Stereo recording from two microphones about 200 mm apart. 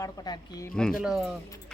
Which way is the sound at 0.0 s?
20° left (ahead or behind).